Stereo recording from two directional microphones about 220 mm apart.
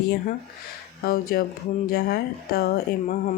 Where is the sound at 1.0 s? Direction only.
45° left (ahead or behind).